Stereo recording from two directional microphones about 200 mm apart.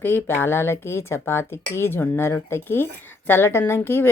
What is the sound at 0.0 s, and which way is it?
Speech, 10° left (ahead or behind).